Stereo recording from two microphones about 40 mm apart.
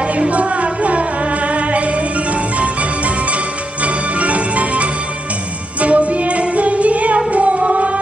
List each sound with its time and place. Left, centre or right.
0.3 s music: right